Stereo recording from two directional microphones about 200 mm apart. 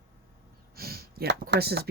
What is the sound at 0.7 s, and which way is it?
Speech, 50° right (ahead or behind).